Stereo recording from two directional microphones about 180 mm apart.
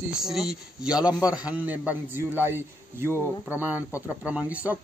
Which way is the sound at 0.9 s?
20° left (ahead or behind).